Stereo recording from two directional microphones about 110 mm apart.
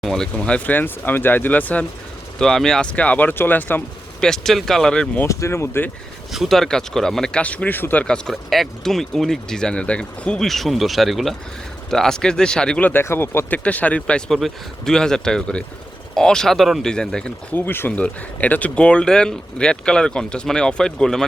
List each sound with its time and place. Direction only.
0.0 s speech: 5° left (ahead or behind)
4.2 s speech: 5° left (ahead or behind)
5.2 s speech: 25° left (ahead or behind)
6.3 s speech: centre (ahead or behind); by 8.0 s 15° left (ahead or behind)
8.0 s speech: 5° left (ahead or behind)
17.5 s speech: 20° left (ahead or behind)